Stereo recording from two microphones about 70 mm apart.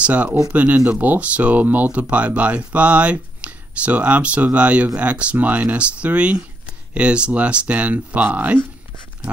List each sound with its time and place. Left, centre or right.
0.0 s speech: centre